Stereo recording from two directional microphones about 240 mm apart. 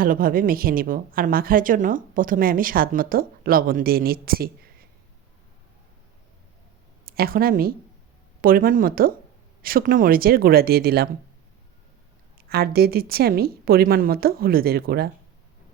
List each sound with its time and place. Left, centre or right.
0.0 s a woman's voice: right
7.0 s a woman's voice: right
12.4 s a woman's voice: right